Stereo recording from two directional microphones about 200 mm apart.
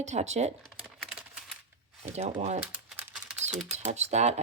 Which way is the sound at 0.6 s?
Centre (ahead or behind).